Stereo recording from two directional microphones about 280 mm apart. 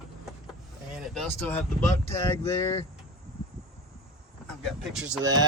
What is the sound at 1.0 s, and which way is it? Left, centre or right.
Speech, centre.